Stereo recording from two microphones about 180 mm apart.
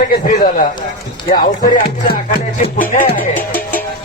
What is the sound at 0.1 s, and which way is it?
Speech, 50° left (ahead or behind).